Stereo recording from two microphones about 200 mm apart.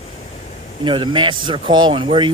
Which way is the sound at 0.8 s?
25° right (ahead or behind).